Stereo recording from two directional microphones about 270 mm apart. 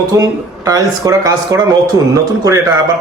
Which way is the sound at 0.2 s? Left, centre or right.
Centre.